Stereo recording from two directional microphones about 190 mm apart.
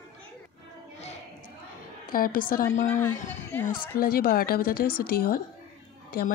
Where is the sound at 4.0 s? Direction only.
50° left (ahead or behind).